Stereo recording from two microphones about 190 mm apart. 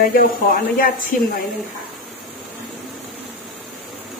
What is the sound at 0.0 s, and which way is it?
Speech, 50° left (ahead or behind).